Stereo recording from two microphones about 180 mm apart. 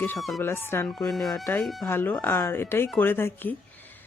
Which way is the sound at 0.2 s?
Centre (ahead or behind).